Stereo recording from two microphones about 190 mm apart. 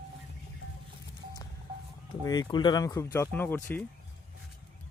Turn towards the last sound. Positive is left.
turn(degrees=10)  # may be behind; listen again after turning